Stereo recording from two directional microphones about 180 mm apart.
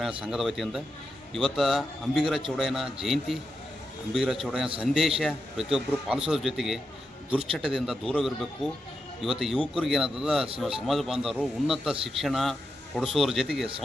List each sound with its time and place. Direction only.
0.0 s a man's voice: 5° right (ahead or behind)